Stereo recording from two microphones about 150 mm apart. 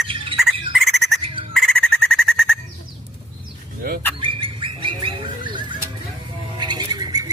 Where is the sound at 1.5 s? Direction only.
Centre (ahead or behind).